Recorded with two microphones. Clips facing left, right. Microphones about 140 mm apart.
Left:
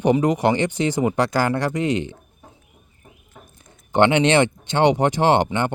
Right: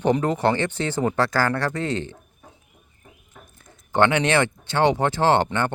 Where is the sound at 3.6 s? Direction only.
20° left (ahead or behind).